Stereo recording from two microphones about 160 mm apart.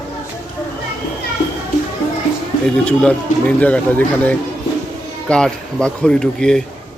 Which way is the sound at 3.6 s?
10° left (ahead or behind).